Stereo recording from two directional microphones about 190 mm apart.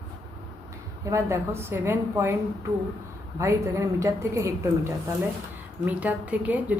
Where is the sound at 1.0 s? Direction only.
15° right (ahead or behind).